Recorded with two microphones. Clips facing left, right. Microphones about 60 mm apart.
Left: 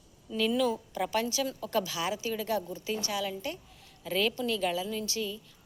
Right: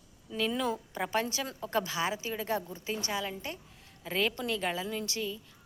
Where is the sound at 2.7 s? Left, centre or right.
Right.